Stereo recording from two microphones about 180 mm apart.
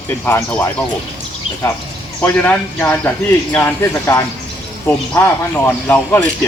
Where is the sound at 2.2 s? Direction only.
10° left (ahead or behind).